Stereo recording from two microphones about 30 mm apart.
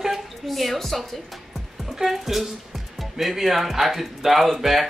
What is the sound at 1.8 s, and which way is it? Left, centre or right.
Speech, centre.